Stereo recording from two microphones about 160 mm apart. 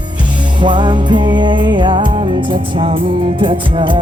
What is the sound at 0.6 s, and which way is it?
Music, 30° right (ahead or behind).